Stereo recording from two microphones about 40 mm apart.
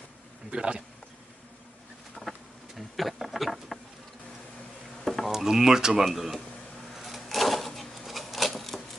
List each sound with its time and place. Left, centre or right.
0.5 s speech: right
2.2 s insect: centre
5.0 s a sound: centre
5.3 s speech: centre
6.1 s speech: centre
6.9 s a sound: centre